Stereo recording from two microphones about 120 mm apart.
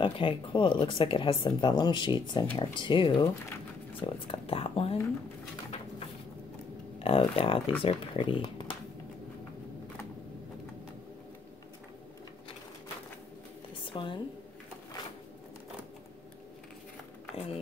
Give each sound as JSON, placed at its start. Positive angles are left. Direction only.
{"t": 0.0, "sound": "speech", "side_deg": 45}
{"t": 7.0, "sound": "speech", "side_deg": 55}
{"t": 13.8, "sound": "speech", "side_deg": 45}